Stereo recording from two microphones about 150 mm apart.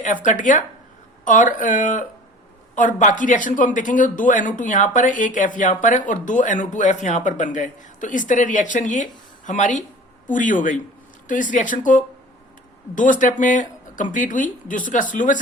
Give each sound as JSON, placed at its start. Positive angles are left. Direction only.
{"t": 0.0, "sound": "speech", "side_deg": 55}